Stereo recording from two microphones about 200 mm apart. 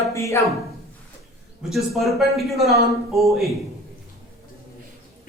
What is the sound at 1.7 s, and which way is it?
Speech, centre (ahead or behind).